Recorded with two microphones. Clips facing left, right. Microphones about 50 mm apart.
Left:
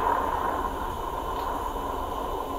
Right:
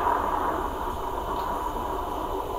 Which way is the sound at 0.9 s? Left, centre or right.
Centre.